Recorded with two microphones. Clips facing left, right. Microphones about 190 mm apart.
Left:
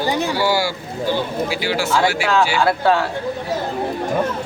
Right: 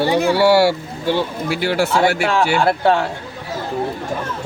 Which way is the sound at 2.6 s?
25° right (ahead or behind).